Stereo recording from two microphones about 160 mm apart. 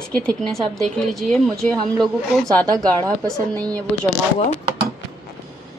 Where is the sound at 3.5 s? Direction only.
25° right (ahead or behind).